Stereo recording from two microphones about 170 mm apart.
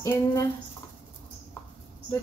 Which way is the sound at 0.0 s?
20° left (ahead or behind).